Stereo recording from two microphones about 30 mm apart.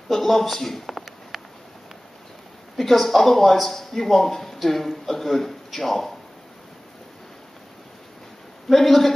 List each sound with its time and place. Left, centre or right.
0.1 s speech: centre
1.3 s a sound: centre
2.8 s speech: centre
8.6 s speech: centre